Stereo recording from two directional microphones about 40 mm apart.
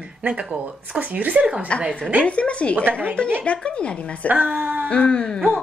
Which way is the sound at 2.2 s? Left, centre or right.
Left.